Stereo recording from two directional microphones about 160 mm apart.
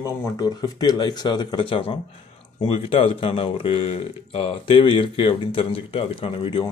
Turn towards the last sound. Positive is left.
turn(degrees=35)  # may be behind; listen again after turning